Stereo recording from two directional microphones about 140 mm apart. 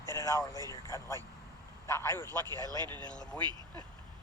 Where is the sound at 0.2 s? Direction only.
25° left (ahead or behind).